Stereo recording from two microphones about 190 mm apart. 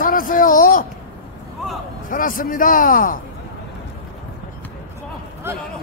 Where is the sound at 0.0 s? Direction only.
45° left (ahead or behind).